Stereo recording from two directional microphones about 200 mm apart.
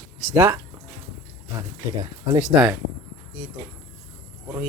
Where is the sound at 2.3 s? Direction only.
5° right (ahead or behind).